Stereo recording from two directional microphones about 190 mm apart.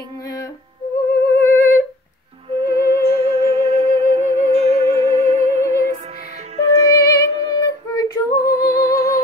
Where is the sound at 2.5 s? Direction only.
30° right (ahead or behind).